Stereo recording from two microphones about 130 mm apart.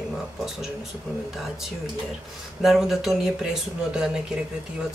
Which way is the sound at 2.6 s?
Centre (ahead or behind).